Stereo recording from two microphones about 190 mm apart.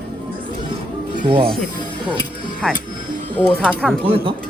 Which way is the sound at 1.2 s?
25° right (ahead or behind).